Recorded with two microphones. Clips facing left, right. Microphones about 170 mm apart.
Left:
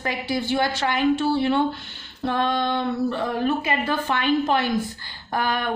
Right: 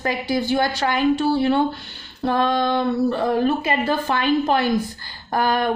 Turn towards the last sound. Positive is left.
turn(degrees=-40)  # may be behind; listen again after turning